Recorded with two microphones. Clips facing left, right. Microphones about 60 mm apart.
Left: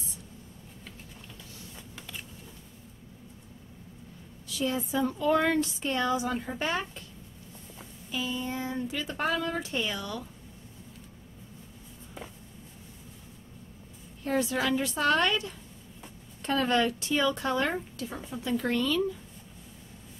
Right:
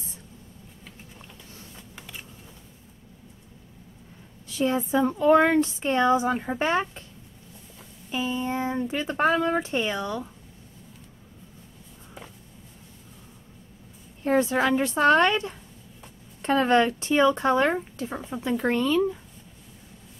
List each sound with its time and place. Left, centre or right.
2.0 s a sound: centre
4.5 s speech: right
8.1 s speech: right
14.2 s speech: right